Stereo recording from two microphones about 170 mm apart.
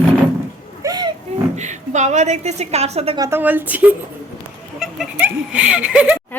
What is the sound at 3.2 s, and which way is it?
Speech, 15° right (ahead or behind).